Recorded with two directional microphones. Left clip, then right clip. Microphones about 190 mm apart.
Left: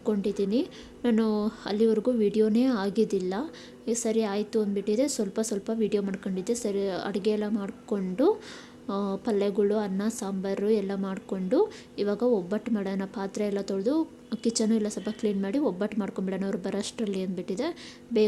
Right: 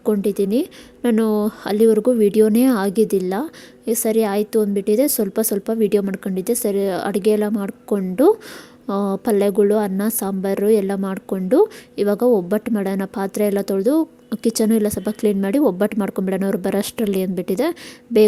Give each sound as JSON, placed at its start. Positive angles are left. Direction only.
{"t": 0.0, "sound": "a woman's voice", "side_deg": -40}